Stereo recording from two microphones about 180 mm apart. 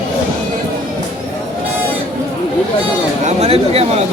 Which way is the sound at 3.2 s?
35° right (ahead or behind).